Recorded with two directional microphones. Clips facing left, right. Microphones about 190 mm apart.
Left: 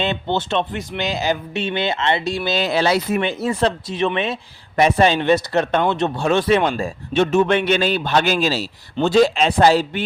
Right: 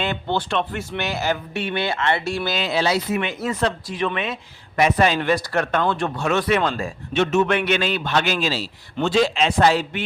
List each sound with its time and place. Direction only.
0.0 s speech: 20° left (ahead or behind)
2.6 s speech: 50° left (ahead or behind)
3.2 s speech: 30° left (ahead or behind)